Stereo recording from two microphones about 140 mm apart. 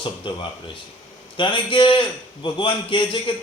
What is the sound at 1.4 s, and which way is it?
Speech, 35° left (ahead or behind).